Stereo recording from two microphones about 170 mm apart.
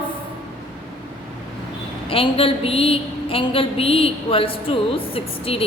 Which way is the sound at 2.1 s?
35° left (ahead or behind).